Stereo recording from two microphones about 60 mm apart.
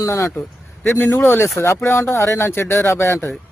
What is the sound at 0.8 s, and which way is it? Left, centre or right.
Speech, left.